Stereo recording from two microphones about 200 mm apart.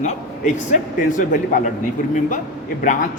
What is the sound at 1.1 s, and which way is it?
Speech, 40° left (ahead or behind).